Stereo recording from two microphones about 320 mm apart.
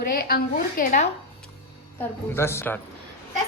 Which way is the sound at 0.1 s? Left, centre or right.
Left.